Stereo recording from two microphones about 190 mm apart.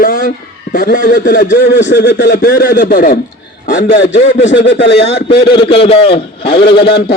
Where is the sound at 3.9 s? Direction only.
65° left (ahead or behind).